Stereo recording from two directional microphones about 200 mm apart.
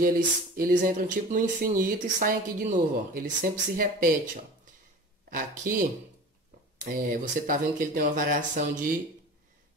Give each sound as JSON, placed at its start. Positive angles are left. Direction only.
{"t": 0.6, "sound": "speech", "side_deg": -45}
{"t": 5.3, "sound": "speech", "side_deg": -45}
{"t": 7.0, "sound": "speech", "side_deg": -45}